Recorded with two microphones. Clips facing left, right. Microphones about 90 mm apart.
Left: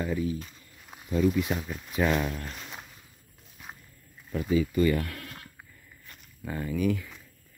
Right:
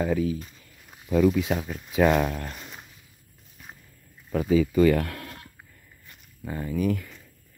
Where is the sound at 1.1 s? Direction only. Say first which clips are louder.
Right 4 dB; 90° right.